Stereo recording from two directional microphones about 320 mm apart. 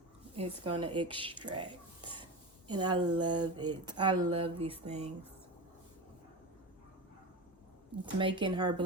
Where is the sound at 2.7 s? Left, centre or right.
Centre.